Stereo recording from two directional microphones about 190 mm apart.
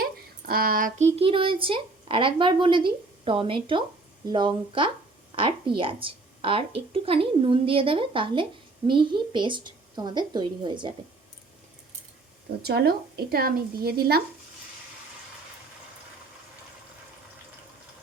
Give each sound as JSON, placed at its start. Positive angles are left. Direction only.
{"t": 0.0, "sound": "a woman's voice", "side_deg": -50}
{"t": 12.6, "sound": "a woman's voice", "side_deg": -55}